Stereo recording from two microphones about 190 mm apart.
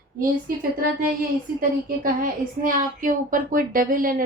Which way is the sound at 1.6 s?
50° right (ahead or behind).